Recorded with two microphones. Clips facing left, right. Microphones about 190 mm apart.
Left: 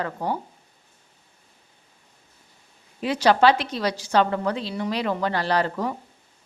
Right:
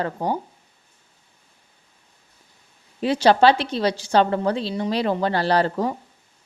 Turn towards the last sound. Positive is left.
turn(degrees=-30)  # may be behind; listen again after turning